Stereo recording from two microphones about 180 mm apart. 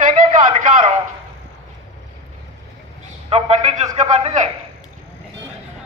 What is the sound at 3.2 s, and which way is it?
A man's voice, 35° right (ahead or behind).